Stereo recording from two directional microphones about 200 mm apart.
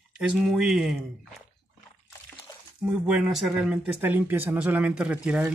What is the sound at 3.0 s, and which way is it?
Speech, centre (ahead or behind).